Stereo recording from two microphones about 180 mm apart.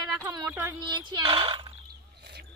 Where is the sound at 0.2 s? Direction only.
15° right (ahead or behind).